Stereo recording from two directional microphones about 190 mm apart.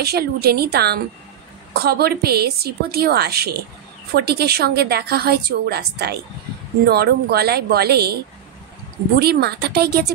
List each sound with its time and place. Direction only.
0.0 s a woman's voice: 55° right (ahead or behind)
9.2 s a woman's voice: 55° right (ahead or behind)